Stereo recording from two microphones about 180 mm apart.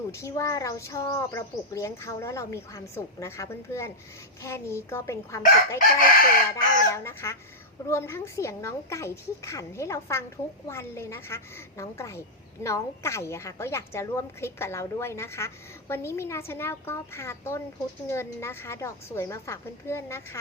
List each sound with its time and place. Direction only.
0.1 s a woman's voice: 15° left (ahead or behind)